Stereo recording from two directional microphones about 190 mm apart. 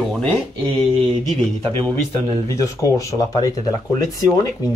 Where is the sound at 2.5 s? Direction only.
15° left (ahead or behind).